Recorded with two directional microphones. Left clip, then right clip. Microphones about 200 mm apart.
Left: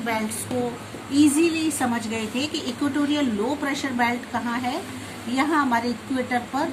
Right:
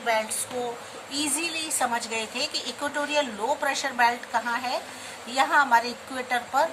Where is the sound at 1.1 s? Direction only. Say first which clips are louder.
Left 9 dB; 15° right (ahead or behind).